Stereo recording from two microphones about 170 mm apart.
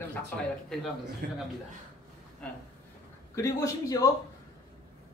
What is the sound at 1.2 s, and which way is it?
Speech, 65° right (ahead or behind).